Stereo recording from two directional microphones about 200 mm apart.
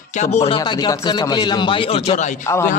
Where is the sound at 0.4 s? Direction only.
25° left (ahead or behind).